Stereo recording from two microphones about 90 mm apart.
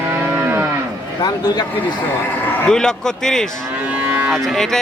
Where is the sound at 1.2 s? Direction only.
50° left (ahead or behind).